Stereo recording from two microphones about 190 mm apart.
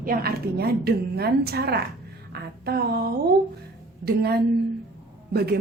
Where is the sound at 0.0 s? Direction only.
50° right (ahead or behind).